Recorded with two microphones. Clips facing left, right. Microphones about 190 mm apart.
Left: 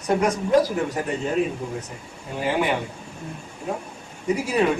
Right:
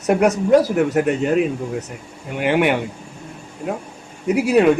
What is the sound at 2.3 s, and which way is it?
Speech, 70° right (ahead or behind).